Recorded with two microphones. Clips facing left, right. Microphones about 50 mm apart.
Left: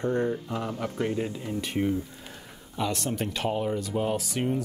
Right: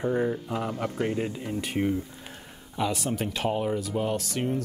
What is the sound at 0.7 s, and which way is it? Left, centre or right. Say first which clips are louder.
Speech: even; right.